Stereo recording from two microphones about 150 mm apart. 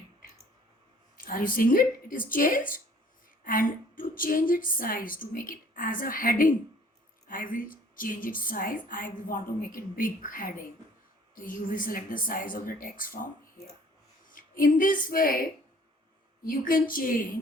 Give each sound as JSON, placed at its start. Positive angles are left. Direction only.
{"t": 1.1, "sound": "a woman's voice", "side_deg": 70}